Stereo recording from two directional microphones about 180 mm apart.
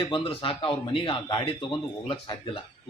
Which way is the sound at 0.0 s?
30° left (ahead or behind).